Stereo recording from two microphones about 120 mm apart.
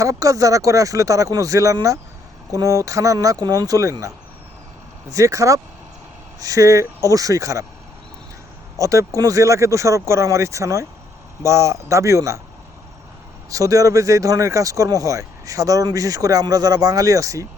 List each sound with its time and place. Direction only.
0.0 s speech: 30° right (ahead or behind)
8.8 s speech: 25° right (ahead or behind)
13.5 s speech: 30° right (ahead or behind)